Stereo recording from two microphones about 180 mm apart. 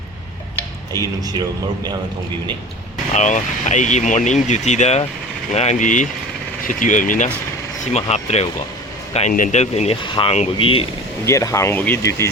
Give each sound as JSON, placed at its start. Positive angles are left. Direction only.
{"t": 1.0, "sound": "speech", "side_deg": -20}
{"t": 3.1, "sound": "speech", "side_deg": 45}
{"t": 11.3, "sound": "speech", "side_deg": 15}